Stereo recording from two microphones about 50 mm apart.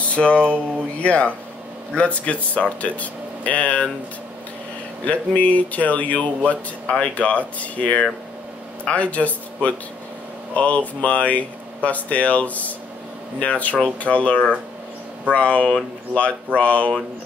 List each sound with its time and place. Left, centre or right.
0.1 s speech: left
5.0 s speech: left